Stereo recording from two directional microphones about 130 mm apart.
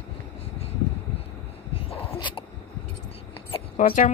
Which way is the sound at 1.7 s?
45° left (ahead or behind).